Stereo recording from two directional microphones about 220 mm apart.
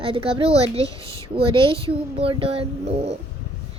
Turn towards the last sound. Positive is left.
turn(degrees=-30)  # may be behind; listen again after turning